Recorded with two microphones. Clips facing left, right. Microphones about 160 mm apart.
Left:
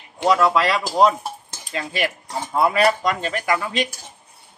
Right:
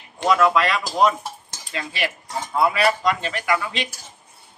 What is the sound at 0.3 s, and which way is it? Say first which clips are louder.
Speech: left 1 dB; 35° left (ahead or behind).